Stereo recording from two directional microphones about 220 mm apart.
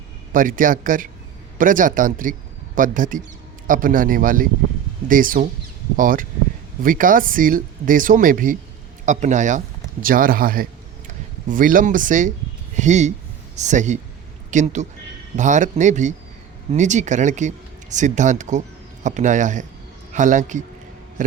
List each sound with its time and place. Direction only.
0.3 s a man's voice: 40° right (ahead or behind)